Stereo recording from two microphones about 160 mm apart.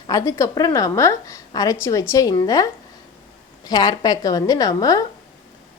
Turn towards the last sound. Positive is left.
turn(degrees=25)  # may be behind; listen again after turning